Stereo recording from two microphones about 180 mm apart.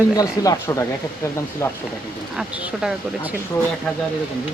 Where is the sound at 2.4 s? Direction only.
5° right (ahead or behind).